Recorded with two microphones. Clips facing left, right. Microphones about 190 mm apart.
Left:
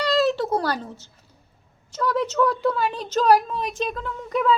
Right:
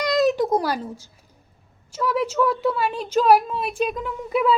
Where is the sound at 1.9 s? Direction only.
10° right (ahead or behind).